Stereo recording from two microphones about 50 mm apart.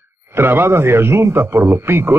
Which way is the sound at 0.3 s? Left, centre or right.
Right.